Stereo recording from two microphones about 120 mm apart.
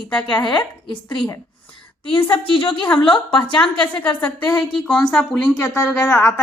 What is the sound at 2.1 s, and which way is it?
A woman's voice, 45° left (ahead or behind).